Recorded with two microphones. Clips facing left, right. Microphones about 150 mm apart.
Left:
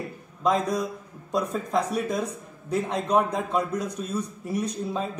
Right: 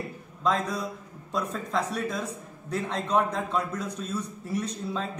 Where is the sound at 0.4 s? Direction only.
15° left (ahead or behind).